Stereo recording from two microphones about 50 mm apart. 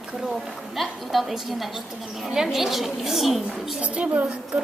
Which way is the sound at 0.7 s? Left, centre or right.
Centre.